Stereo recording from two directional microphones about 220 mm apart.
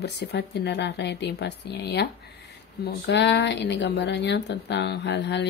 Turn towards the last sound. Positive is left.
turn(degrees=50)  # may be behind; listen again after turning